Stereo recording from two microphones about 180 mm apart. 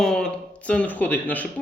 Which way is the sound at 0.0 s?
5° left (ahead or behind).